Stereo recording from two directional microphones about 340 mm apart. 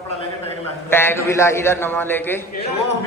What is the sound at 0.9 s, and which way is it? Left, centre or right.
A man's voice, centre.